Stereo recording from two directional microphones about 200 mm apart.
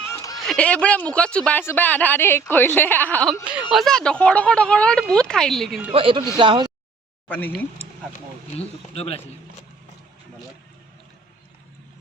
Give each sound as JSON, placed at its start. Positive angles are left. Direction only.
{"t": 0.1, "sound": "a sound", "side_deg": 15}
{"t": 0.3, "sound": "speech", "side_deg": 5}
{"t": 3.4, "sound": "speech", "side_deg": -5}
{"t": 5.9, "sound": "speech", "side_deg": -25}
{"t": 7.3, "sound": "speech", "side_deg": 10}
{"t": 8.5, "sound": "speech", "side_deg": 30}